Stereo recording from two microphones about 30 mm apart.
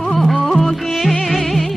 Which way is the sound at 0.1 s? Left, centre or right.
Centre.